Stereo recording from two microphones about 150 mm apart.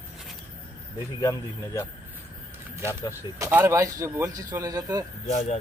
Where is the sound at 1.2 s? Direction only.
20° left (ahead or behind).